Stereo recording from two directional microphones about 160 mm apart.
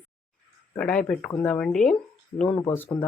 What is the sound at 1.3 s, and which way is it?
Speech, 15° left (ahead or behind).